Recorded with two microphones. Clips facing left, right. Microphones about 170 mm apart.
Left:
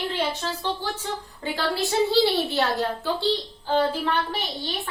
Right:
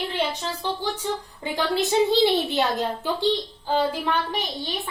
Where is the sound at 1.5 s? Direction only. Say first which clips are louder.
Right 3 dB; 20° right (ahead or behind).